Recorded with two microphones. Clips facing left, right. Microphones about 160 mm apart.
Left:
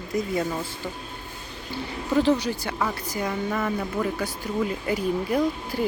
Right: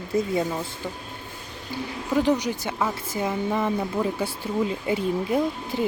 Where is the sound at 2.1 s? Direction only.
15° right (ahead or behind).